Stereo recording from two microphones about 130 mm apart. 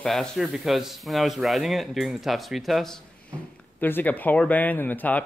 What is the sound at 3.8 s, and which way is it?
Speech, 15° left (ahead or behind).